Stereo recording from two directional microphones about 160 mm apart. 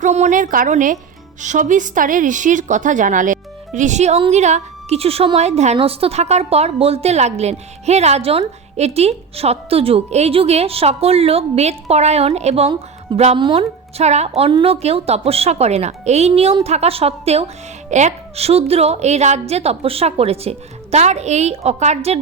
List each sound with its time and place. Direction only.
0.0 s a woman's voice: 50° right (ahead or behind)